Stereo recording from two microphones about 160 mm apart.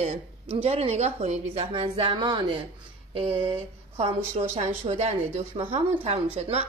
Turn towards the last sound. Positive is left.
turn(degrees=-40)  # may be behind; listen again after turning